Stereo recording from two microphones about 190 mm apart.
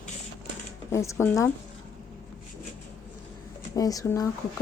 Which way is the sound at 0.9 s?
15° left (ahead or behind).